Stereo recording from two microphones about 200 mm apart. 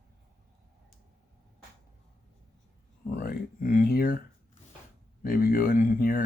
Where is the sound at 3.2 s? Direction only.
45° left (ahead or behind).